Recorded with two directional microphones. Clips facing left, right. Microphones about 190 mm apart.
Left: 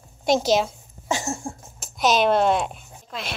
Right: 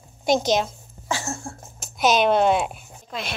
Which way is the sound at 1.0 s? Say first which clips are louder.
Left 2 dB; 20° left (ahead or behind).